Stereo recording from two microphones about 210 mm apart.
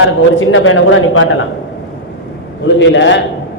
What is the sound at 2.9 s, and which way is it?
Speech, 60° left (ahead or behind).